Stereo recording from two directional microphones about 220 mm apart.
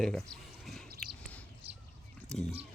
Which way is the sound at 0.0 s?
Centre (ahead or behind).